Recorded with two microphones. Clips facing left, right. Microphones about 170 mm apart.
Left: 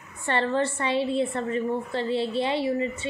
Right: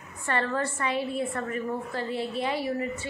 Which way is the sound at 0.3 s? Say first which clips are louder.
Left 4 dB; 25° left (ahead or behind).